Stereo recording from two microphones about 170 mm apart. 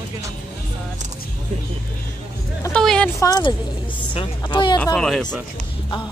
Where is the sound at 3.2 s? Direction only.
20° left (ahead or behind).